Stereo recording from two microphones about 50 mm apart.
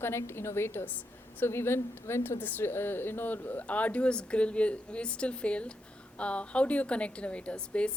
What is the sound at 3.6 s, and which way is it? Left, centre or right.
A woman's voice, left.